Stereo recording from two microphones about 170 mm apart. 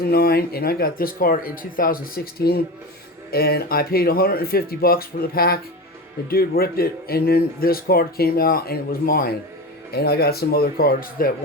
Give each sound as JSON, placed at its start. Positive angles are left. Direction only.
{"t": 0.0, "sound": "speech", "side_deg": 65}